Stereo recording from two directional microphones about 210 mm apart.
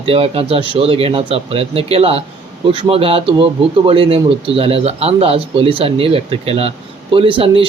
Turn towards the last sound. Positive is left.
turn(degrees=-25)  # may be behind; listen again after turning